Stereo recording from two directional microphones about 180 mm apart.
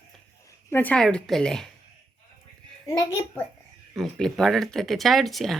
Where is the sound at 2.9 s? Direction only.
20° left (ahead or behind).